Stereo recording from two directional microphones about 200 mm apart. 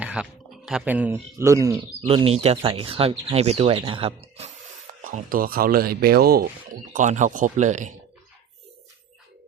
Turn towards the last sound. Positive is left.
turn(degrees=-40)  # may be behind; listen again after turning